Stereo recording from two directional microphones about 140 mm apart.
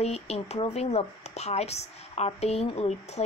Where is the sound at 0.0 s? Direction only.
50° left (ahead or behind).